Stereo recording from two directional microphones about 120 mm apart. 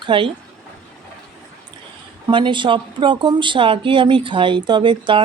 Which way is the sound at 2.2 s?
40° right (ahead or behind).